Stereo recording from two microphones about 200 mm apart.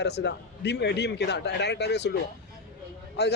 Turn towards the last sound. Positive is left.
turn(degrees=55)  # may be behind; listen again after turning